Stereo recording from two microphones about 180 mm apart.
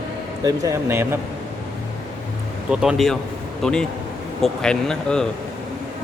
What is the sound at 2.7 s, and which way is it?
Speech, centre (ahead or behind).